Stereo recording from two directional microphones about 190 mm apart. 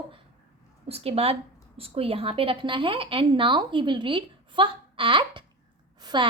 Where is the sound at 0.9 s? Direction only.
35° right (ahead or behind).